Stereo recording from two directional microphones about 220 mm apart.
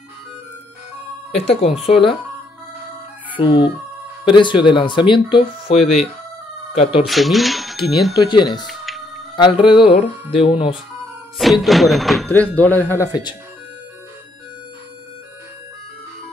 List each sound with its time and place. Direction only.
1.3 s speech: 30° left (ahead or behind)
4.2 s speech: 20° left (ahead or behind)
5.8 s speech: centre (ahead or behind)
6.8 s speech: 25° left (ahead or behind)
7.1 s speech: centre (ahead or behind)
8.1 s speech: 20° left (ahead or behind)
8.6 s music: centre (ahead or behind)
9.4 s speech: 20° left (ahead or behind)
11.3 s speech: centre (ahead or behind); by 13.4 s 20° left (ahead or behind)